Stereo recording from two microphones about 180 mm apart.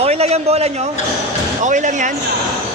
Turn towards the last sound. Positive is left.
turn(degrees=-45)  # may be behind; listen again after turning